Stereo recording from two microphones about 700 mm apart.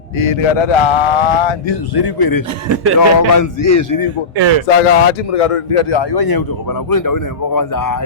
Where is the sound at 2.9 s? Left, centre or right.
Left.